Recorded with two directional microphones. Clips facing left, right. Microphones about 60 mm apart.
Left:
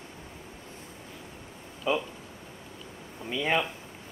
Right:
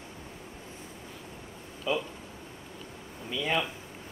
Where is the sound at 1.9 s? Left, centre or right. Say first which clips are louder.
Left 2 dB; left.